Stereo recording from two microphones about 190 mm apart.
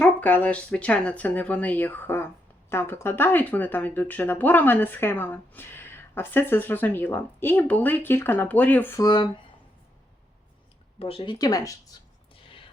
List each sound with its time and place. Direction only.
0.0 s speech: 10° left (ahead or behind)
11.0 s speech: 30° left (ahead or behind)